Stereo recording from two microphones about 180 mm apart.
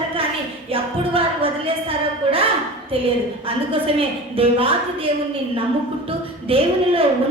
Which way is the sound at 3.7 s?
30° right (ahead or behind).